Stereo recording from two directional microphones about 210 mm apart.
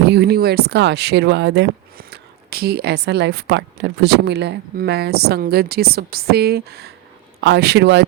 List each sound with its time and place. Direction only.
0.0 s speech: 50° right (ahead or behind)